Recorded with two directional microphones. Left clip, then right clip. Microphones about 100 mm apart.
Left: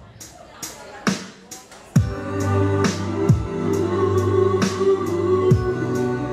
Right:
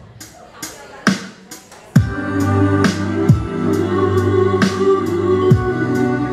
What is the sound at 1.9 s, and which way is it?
Music, 20° right (ahead or behind).